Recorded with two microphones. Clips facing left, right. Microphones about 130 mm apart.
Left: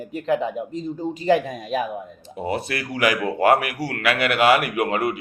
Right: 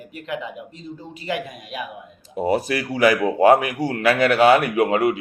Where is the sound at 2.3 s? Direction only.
35° right (ahead or behind).